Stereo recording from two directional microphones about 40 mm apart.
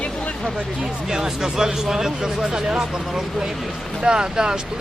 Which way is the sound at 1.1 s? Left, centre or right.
Centre.